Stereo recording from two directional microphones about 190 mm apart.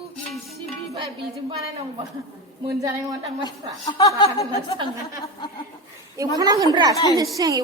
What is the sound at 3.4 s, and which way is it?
Speech, 20° left (ahead or behind).